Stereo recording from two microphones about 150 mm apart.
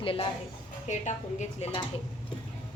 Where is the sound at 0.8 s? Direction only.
50° left (ahead or behind).